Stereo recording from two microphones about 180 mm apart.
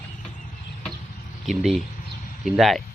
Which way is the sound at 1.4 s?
Centre (ahead or behind).